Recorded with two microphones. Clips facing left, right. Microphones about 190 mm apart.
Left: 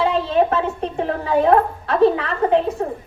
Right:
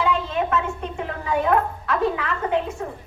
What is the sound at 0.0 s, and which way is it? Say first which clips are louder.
A woman's voice: left 6 dB; 35° left (ahead or behind).